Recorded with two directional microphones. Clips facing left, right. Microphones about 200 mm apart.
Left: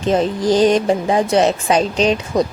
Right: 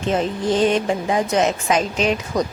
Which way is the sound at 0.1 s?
35° left (ahead or behind).